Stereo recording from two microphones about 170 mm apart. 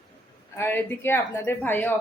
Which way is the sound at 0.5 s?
10° left (ahead or behind).